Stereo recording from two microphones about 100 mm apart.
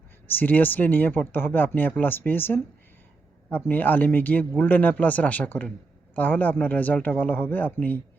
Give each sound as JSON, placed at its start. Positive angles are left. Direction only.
{"t": 0.3, "sound": "speech", "side_deg": 20}